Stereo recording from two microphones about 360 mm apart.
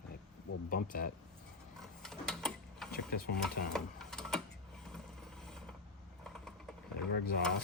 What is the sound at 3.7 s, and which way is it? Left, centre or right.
Sewing machine, centre.